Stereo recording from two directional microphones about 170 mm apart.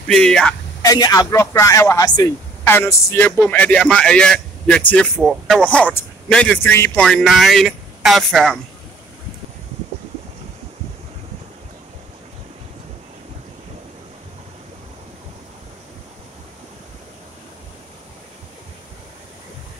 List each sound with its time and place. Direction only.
0.0 s speech: 5° left (ahead or behind)
0.8 s a man's voice: 20° left (ahead or behind)
7.1 s speech: centre (ahead or behind)